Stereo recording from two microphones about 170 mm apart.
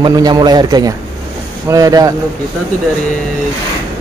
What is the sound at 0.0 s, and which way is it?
Speech, 25° right (ahead or behind).